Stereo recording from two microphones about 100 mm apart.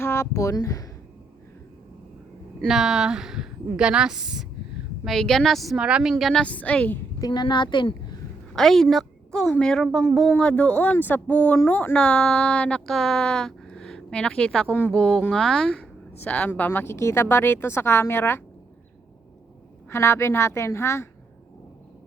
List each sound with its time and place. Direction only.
0.0 s speech: 25° left (ahead or behind)
2.6 s a woman's voice: 5° right (ahead or behind)
5.0 s a woman's voice: 5° left (ahead or behind)
6.4 s speech: 15° left (ahead or behind)
7.2 s a woman's voice: 45° left (ahead or behind)
8.5 s a woman's voice: centre (ahead or behind); by 18.4 s 20° left (ahead or behind)
19.9 s speech: 25° left (ahead or behind)